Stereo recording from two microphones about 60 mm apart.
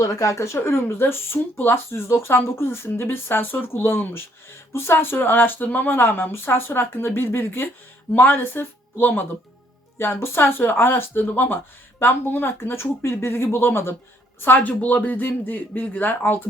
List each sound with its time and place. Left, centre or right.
0.0 s speech: left
14.4 s speech: left